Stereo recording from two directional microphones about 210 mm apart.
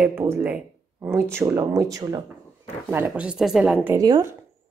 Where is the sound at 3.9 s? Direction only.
15° right (ahead or behind).